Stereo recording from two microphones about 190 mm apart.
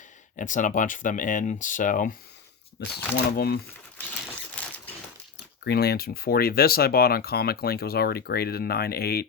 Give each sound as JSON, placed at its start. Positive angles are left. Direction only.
{"t": 0.3, "sound": "speech", "side_deg": 45}
{"t": 2.9, "sound": "speech", "side_deg": 55}
{"t": 4.6, "sound": "a sound", "side_deg": 5}
{"t": 5.6, "sound": "speech", "side_deg": 55}